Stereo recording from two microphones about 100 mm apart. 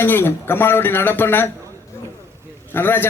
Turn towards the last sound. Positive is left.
turn(degrees=20)  # may be behind; listen again after turning